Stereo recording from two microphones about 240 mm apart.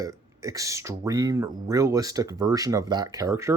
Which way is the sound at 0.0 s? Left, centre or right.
Centre.